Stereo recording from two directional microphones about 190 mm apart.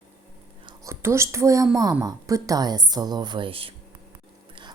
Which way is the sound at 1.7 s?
20° right (ahead or behind).